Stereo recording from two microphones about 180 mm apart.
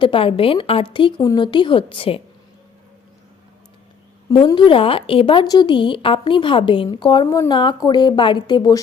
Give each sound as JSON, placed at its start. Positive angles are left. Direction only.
{"t": 0.0, "sound": "a woman's voice", "side_deg": 30}
{"t": 4.3, "sound": "a woman's voice", "side_deg": 25}